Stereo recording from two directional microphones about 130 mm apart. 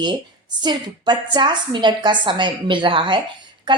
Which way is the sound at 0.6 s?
35° right (ahead or behind).